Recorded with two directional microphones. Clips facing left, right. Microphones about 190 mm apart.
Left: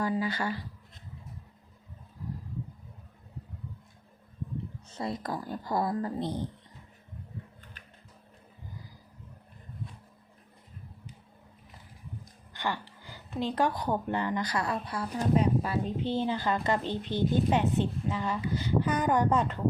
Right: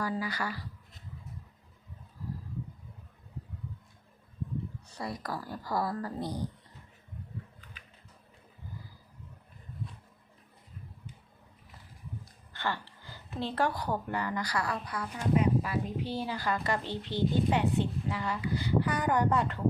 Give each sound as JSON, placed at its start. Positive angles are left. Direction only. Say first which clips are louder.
{"t": 0.0, "sound": "a woman's voice", "louder": "left 4 dB", "side_deg": 25}
{"t": 4.9, "sound": "a woman's voice", "louder": "left 4 dB", "side_deg": 25}
{"t": 12.5, "sound": "a woman's voice", "louder": "left 1 dB", "side_deg": 15}